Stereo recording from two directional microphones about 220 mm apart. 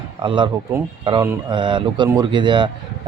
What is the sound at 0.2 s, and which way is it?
Speech, 20° right (ahead or behind).